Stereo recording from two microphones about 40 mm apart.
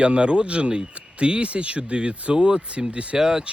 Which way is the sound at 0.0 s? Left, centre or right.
Right.